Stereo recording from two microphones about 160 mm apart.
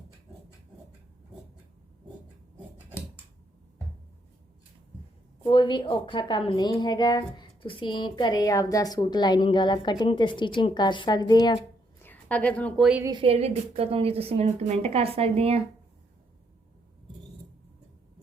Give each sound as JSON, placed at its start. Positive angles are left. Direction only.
{"t": 5.4, "sound": "a woman's voice", "side_deg": 30}
{"t": 12.0, "sound": "a woman's voice", "side_deg": 10}
{"t": 13.1, "sound": "a woman's voice", "side_deg": -35}